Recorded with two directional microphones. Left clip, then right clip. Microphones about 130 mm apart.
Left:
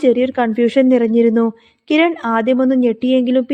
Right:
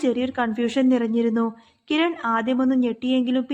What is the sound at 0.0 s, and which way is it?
A woman's voice, 35° left (ahead or behind).